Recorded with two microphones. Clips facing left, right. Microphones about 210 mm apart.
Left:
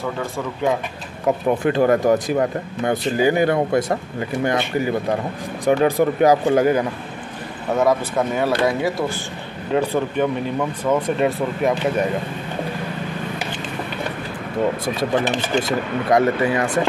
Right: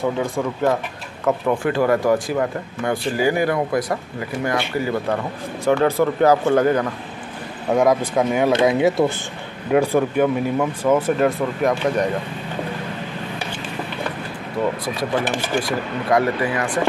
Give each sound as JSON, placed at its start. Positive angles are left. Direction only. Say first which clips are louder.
{"t": 1.2, "sound": "speech", "louder": "left 1 dB", "side_deg": 20}
{"t": 7.7, "sound": "speech", "louder": "right 2 dB", "side_deg": -10}
{"t": 9.7, "sound": "speech", "louder": "right 3 dB", "side_deg": -10}
{"t": 15.0, "sound": "speech", "louder": "left 2 dB", "side_deg": 20}